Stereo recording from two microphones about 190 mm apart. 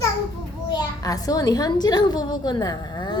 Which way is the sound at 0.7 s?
20° left (ahead or behind).